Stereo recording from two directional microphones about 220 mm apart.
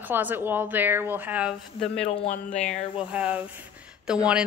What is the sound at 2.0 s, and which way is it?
Speech, 30° left (ahead or behind).